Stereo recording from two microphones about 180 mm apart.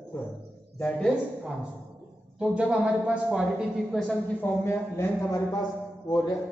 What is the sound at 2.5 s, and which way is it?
Speech, 5° right (ahead or behind).